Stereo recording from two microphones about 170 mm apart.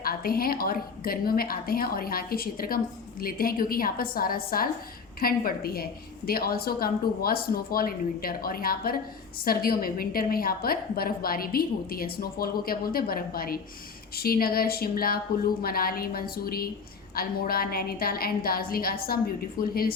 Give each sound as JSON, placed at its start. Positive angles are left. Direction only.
{"t": 0.0, "sound": "a woman's voice", "side_deg": 60}